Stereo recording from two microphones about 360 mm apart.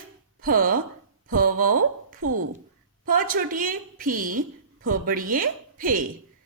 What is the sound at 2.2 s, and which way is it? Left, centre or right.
Speech, right.